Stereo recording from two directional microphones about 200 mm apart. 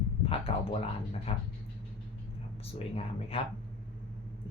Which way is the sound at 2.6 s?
30° left (ahead or behind).